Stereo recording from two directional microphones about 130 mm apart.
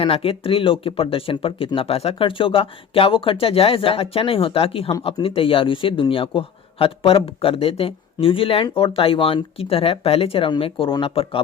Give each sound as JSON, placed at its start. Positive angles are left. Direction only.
{"t": 0.0, "sound": "a man's voice", "side_deg": 45}